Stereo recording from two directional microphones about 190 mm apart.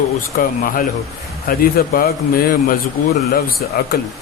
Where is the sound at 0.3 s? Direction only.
50° left (ahead or behind).